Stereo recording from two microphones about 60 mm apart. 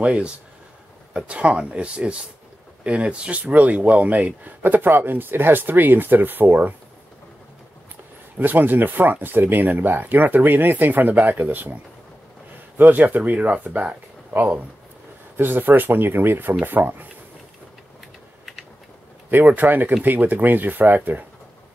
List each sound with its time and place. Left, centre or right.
0.0 s speech: centre
8.4 s speech: right
19.3 s speech: right